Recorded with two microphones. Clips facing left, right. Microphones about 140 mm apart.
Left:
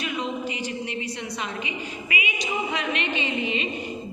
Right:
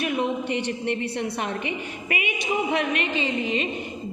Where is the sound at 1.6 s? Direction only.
55° right (ahead or behind).